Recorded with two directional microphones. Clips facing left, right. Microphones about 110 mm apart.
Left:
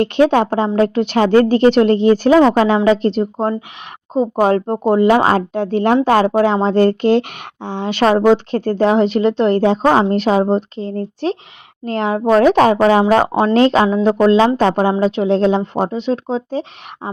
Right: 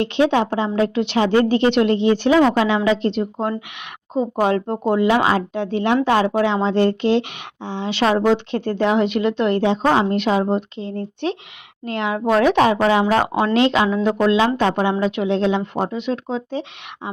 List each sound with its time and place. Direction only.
0.0 s a woman's voice: 45° left (ahead or behind)